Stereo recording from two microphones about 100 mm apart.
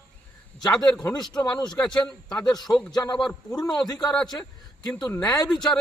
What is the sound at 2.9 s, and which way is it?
Speech, 45° left (ahead or behind).